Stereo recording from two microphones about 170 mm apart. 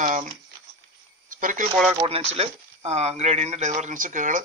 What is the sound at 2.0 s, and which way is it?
Speech, 35° right (ahead or behind).